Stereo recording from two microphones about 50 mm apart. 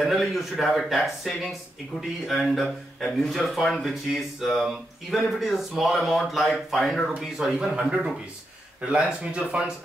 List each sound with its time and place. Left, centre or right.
0.0 s speech: centre
7.5 s speech: centre